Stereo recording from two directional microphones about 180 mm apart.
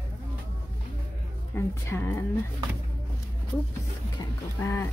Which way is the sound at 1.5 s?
10° left (ahead or behind).